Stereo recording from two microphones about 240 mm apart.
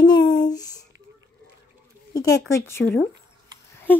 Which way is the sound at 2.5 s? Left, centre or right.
Centre.